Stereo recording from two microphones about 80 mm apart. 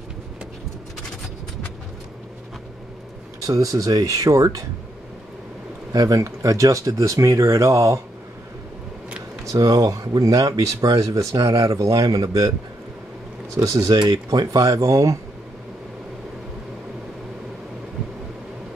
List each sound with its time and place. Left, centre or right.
3.4 s speech: right
5.9 s speech: right
9.5 s speech: right
13.6 s speech: right
13.9 s speech: right